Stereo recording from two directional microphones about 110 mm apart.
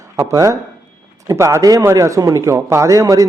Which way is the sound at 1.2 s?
25° right (ahead or behind).